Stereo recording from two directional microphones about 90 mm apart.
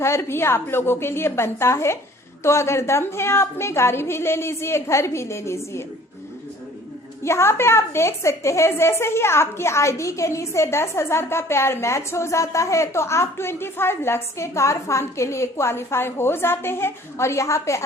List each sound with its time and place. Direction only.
0.0 s a woman's voice: 30° left (ahead or behind)
7.3 s a woman's voice: 30° left (ahead or behind)